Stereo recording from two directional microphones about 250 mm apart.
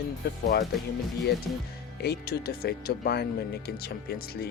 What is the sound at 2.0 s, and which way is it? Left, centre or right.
Speech, left.